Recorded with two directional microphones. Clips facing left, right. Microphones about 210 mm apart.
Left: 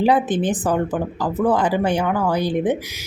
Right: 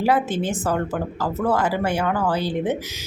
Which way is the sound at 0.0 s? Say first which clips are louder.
Left 3 dB; 20° left (ahead or behind).